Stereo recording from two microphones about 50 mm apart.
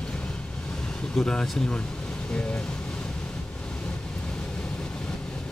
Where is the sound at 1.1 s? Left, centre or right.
Centre.